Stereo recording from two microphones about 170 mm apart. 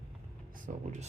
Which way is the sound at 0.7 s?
50° right (ahead or behind).